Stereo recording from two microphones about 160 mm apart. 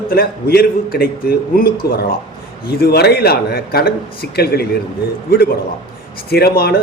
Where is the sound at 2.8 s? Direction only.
85° left.